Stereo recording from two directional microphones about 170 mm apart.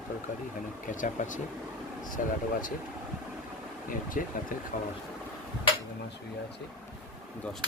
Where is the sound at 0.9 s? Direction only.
50° left (ahead or behind).